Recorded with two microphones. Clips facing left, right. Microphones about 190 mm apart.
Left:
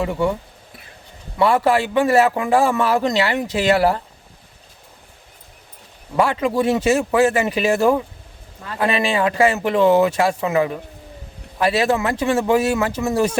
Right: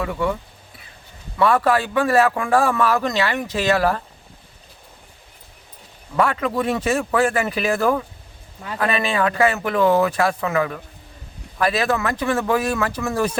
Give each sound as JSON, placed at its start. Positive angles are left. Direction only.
{"t": 0.0, "sound": "a man's voice", "side_deg": 25}
{"t": 1.4, "sound": "a man's voice", "side_deg": 25}
{"t": 6.1, "sound": "a man's voice", "side_deg": 25}